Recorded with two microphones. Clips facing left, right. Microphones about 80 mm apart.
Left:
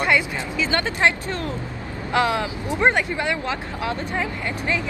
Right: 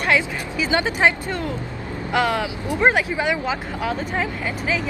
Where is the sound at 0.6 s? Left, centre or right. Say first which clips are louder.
Right 2 dB; centre.